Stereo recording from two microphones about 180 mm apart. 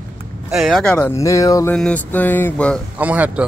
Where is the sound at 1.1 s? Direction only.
20° left (ahead or behind).